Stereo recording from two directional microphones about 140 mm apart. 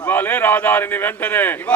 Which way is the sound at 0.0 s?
15° left (ahead or behind).